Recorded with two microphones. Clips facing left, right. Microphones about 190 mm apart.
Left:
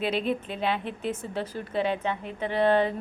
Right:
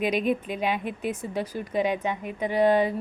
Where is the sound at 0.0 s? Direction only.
15° right (ahead or behind).